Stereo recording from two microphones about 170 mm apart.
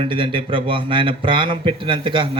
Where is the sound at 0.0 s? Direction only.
30° right (ahead or behind).